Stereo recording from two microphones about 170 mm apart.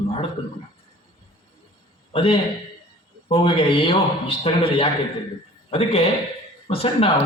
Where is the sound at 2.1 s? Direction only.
35° left (ahead or behind).